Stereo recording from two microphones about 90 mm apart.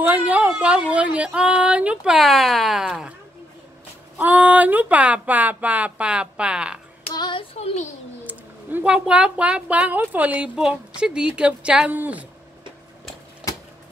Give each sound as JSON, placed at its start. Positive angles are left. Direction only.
{"t": 0.0, "sound": "a sound", "side_deg": -15}
{"t": 0.5, "sound": "speech", "side_deg": -10}
{"t": 2.1, "sound": "speech", "side_deg": 0}
{"t": 4.2, "sound": "speech", "side_deg": -15}
{"t": 7.2, "sound": "child singing", "side_deg": 70}
{"t": 8.2, "sound": "a sound", "side_deg": -20}
{"t": 8.9, "sound": "a woman's voice", "side_deg": -10}